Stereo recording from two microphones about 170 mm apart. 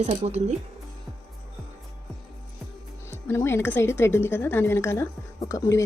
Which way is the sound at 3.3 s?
15° left (ahead or behind).